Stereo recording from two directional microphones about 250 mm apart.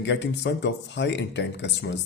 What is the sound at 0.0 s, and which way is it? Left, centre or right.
Speech, left.